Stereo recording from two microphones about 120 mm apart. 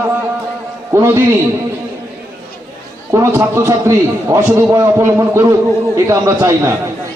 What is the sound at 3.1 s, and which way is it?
A man's voice, 25° right (ahead or behind).